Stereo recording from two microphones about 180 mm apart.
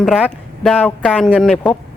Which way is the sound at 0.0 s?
5° left (ahead or behind).